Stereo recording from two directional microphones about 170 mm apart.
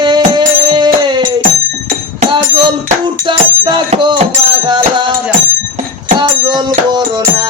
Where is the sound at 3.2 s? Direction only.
25° right (ahead or behind).